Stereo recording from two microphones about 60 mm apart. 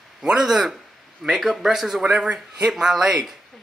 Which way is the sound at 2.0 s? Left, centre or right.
Centre.